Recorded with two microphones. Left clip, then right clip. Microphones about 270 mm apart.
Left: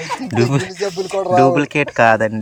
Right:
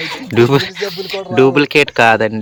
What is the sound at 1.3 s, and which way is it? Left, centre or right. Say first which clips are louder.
Speech: right 3 dB; centre.